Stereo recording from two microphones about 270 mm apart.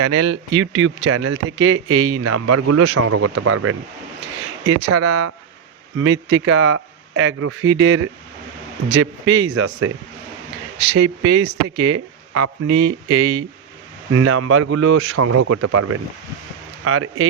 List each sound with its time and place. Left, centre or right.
0.0 s speech: right
0.5 s speech: right
6.0 s speech: right
11.8 s speech: right
13.1 s speech: right